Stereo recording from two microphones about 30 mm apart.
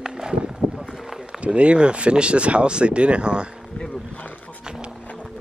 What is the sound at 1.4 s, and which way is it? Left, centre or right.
Speech, right.